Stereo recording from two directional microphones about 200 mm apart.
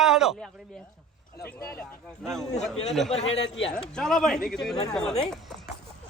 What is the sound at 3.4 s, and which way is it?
Speech, 70° left (ahead or behind).